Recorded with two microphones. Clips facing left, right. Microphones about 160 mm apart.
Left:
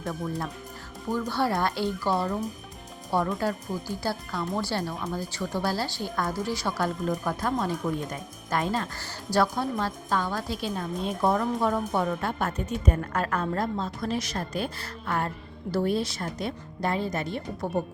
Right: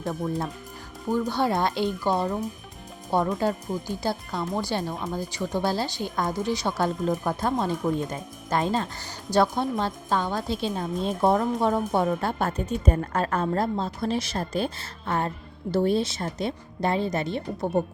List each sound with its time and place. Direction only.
0.0 s speech: 20° right (ahead or behind)